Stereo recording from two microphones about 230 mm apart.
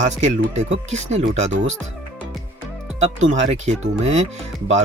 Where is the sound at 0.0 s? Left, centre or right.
Right.